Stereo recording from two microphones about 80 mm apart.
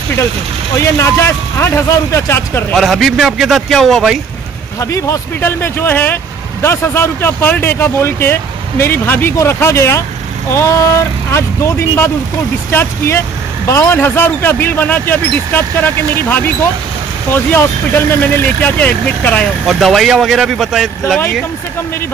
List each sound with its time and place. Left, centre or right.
0.7 s speech: left
2.7 s speech: centre
4.7 s speech: left
5.4 s speech: left
19.6 s speech: centre